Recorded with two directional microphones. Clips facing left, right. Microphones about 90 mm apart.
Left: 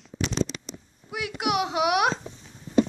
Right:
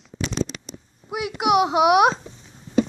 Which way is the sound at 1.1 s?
15° right (ahead or behind).